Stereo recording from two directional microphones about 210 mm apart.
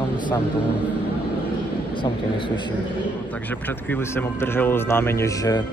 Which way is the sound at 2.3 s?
25° left (ahead or behind).